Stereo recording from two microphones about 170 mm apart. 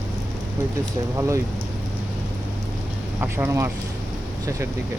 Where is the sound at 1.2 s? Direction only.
15° right (ahead or behind).